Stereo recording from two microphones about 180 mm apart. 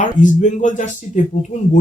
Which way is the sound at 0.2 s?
45° left (ahead or behind).